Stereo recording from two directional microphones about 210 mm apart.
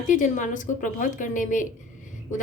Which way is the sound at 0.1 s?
40° left (ahead or behind).